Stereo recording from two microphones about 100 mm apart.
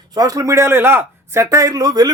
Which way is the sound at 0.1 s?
40° right (ahead or behind).